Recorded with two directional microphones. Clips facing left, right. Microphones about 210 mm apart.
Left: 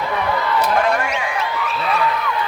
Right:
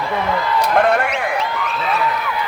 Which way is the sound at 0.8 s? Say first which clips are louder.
Right 3 dB; 60° right (ahead or behind).